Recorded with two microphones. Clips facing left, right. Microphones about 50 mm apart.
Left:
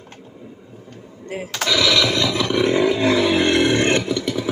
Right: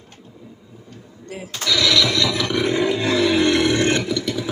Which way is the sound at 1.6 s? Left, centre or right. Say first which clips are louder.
Left 1 dB; left.